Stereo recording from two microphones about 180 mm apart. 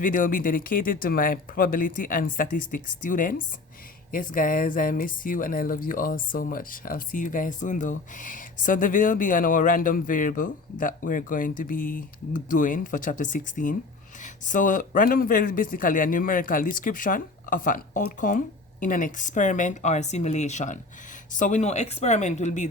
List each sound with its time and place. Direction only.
0.0 s speech: 50° left (ahead or behind)